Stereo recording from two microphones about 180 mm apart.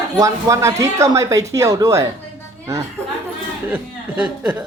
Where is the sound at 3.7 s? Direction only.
10° right (ahead or behind).